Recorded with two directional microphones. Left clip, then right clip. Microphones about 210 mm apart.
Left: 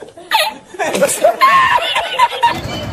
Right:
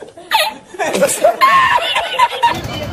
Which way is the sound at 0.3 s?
Centre (ahead or behind).